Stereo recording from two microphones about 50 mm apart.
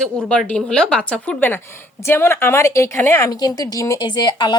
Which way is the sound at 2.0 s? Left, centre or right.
Left.